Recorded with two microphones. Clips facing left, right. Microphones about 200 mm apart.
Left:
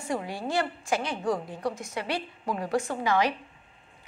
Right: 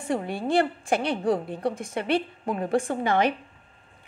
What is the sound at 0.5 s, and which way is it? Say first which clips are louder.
Speech: right 5 dB; 55° right (ahead or behind).